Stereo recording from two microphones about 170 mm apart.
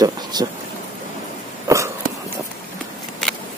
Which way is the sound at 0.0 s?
25° right (ahead or behind).